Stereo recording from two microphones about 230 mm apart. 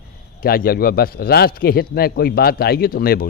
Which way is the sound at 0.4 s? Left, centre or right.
Left.